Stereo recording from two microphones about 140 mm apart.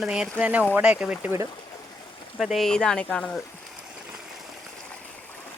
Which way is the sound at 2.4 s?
Centre (ahead or behind).